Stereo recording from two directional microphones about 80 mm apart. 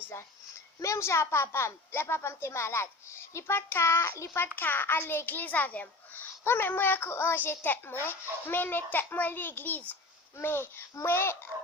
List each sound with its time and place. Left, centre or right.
0.8 s a woman's voice: left